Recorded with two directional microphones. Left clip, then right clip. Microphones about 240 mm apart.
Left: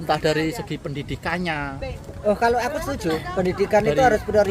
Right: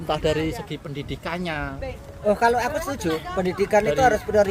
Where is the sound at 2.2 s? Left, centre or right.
Centre.